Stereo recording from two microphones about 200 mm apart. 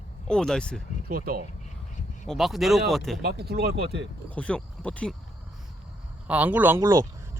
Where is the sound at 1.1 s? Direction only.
50° right (ahead or behind).